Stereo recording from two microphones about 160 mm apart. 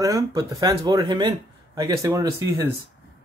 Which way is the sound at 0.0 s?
20° right (ahead or behind).